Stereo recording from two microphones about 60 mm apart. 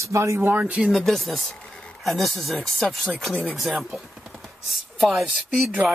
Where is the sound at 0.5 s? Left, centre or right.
Right.